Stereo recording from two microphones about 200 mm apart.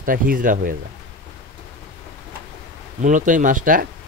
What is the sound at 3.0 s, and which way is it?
Speech, 40° right (ahead or behind).